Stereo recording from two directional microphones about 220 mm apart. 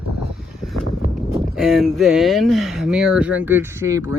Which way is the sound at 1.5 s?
Centre (ahead or behind).